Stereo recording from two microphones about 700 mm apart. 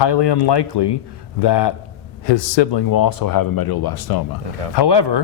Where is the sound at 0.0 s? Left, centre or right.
Left.